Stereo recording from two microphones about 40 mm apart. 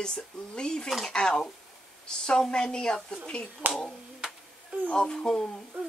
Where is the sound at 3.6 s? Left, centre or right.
Right.